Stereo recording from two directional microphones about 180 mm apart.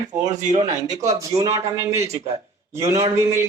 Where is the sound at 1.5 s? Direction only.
15° right (ahead or behind).